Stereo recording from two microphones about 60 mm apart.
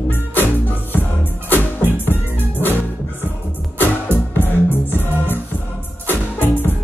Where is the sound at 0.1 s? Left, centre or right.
Left.